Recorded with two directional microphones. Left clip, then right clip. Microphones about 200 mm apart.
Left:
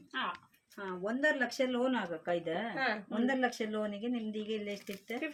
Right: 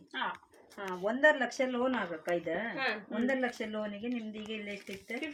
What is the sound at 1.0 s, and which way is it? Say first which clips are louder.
Speech: right 5 dB; 25° left (ahead or behind).